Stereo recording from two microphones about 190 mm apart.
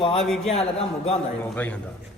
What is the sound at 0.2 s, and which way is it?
Speech, centre (ahead or behind).